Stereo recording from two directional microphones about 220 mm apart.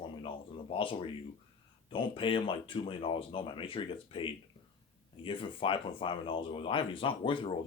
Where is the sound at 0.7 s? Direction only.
25° left (ahead or behind).